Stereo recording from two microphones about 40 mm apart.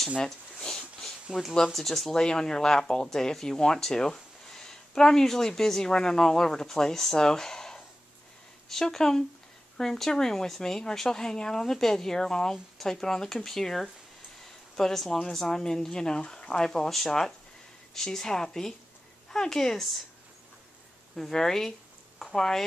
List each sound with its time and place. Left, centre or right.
0.2 s a sound: centre
1.7 s speech: centre
2.1 s speech: centre
17.9 s speech: centre
21.2 s speech: centre